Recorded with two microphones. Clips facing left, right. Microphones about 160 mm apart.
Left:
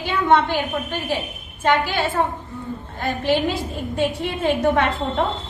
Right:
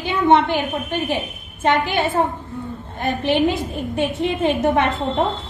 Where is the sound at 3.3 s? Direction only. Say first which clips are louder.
Right 2 dB; 20° right (ahead or behind).